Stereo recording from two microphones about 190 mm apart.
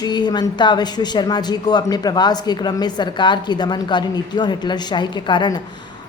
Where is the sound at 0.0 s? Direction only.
20° left (ahead or behind).